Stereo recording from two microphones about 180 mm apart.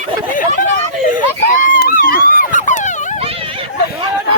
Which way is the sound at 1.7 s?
50° left (ahead or behind).